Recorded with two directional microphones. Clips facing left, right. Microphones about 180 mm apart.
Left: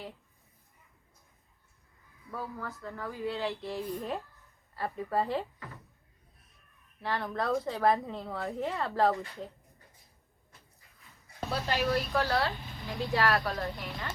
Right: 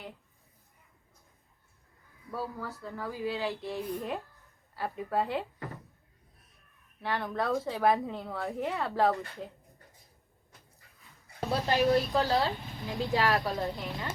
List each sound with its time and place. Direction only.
2.3 s a woman's voice: 5° right (ahead or behind)
7.0 s a woman's voice: centre (ahead or behind)
11.4 s speech: 15° right (ahead or behind)